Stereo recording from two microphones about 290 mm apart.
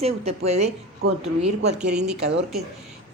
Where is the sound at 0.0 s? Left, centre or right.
Right.